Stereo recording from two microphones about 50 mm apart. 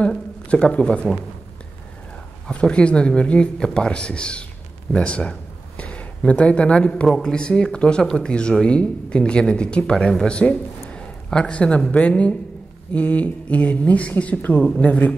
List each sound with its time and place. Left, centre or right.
0.0 s speech: left
2.6 s speech: left